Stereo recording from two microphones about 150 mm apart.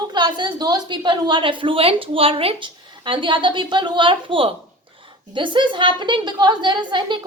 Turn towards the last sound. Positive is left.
turn(degrees=-30)  # may be behind; listen again after turning